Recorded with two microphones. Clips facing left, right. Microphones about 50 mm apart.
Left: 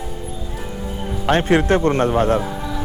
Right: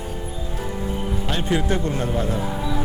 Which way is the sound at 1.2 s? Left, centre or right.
Left.